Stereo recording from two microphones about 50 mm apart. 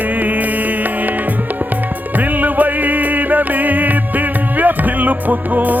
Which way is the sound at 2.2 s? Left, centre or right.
Right.